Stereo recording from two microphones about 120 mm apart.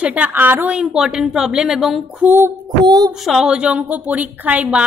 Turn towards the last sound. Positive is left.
turn(degrees=-10)  # may be behind; listen again after turning